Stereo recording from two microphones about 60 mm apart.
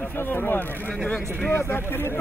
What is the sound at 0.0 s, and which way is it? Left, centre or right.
Speech, left.